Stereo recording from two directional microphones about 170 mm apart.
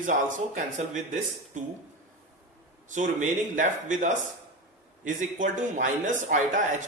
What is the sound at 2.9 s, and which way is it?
A man's voice, 50° right (ahead or behind).